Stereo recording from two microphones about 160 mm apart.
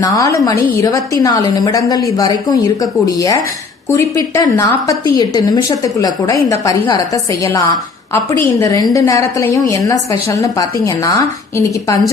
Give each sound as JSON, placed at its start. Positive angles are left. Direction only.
{"t": 0.0, "sound": "a woman's voice", "side_deg": 20}